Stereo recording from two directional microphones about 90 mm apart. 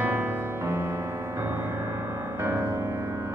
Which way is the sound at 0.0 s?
20° right (ahead or behind).